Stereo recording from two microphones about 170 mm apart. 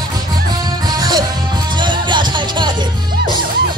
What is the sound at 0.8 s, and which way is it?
Music, 25° right (ahead or behind).